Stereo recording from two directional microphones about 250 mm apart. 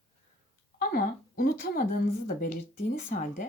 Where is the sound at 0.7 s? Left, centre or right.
Left.